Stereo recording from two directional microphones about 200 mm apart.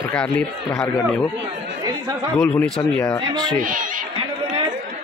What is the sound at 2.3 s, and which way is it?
Speech, centre (ahead or behind).